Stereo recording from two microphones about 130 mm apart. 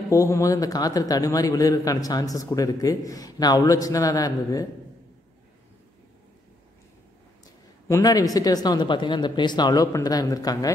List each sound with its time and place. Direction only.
0.1 s a man's voice: 25° left (ahead or behind)
7.9 s a man's voice: 25° left (ahead or behind)